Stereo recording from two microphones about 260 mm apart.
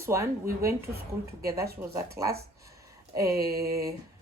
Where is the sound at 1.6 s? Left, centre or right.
Right.